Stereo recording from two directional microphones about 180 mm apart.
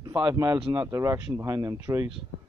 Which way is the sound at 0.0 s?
20° right (ahead or behind).